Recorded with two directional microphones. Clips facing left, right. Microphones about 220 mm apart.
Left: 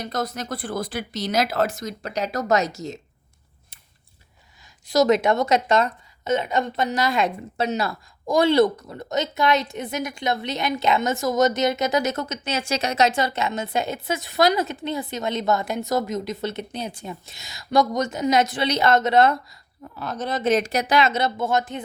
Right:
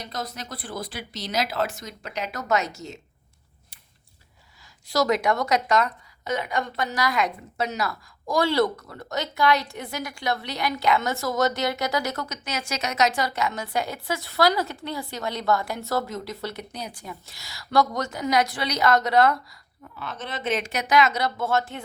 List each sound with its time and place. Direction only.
0.0 s speech: 45° left (ahead or behind)
4.9 s a woman's voice: 20° left (ahead or behind)
20.0 s speech: 40° left (ahead or behind); by 21.8 s 15° left (ahead or behind)